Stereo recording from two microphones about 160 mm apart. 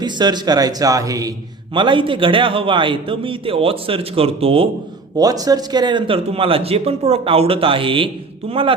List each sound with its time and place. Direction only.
0.0 s a man's voice: 25° right (ahead or behind)
5.1 s a man's voice: 25° right (ahead or behind)